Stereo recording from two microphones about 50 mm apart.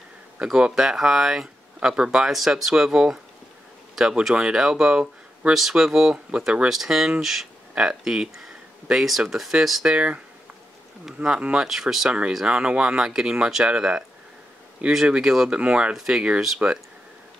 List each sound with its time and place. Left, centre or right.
0.4 s speech: centre
2.3 s speech: centre
5.5 s speech: centre
6.7 s speech: centre
7.7 s speech: centre
9.3 s speech: centre
9.9 s speech: right
11.7 s speech: centre
12.1 s speech: right
15.0 s speech: centre